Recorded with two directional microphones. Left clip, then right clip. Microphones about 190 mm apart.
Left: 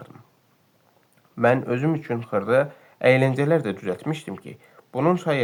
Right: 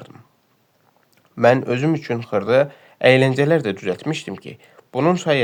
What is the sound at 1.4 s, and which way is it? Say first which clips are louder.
Speech: right 5 dB; 40° right (ahead or behind).